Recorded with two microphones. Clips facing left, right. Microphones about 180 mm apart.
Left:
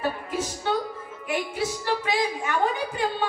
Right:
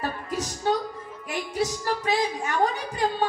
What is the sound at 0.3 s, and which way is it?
A woman's voice, 40° right (ahead or behind).